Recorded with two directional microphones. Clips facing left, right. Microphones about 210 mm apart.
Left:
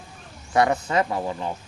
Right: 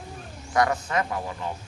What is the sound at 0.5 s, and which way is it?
Speech, 25° left (ahead or behind).